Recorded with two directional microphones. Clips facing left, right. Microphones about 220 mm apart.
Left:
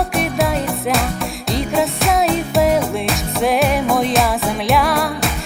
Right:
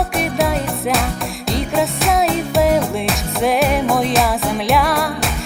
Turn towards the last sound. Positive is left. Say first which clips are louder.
# left 1 dB
turn(degrees=0)  # may be behind; listen again after turning